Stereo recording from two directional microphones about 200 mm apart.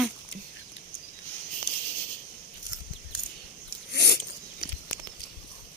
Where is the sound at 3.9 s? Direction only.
55° left (ahead or behind).